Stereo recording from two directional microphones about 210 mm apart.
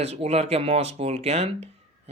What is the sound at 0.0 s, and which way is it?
Speech, 30° right (ahead or behind).